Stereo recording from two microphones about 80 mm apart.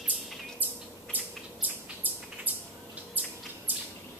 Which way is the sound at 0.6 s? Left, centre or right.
Right.